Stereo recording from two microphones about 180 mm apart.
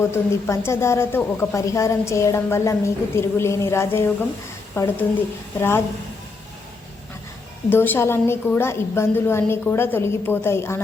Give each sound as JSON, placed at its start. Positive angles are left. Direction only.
{"t": 0.1, "sound": "speech", "side_deg": 15}
{"t": 7.7, "sound": "speech", "side_deg": 10}